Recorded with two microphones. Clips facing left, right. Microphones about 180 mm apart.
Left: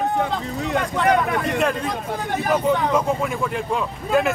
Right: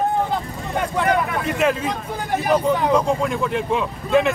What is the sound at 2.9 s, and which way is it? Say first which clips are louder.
Speech: right 2 dB; centre (ahead or behind).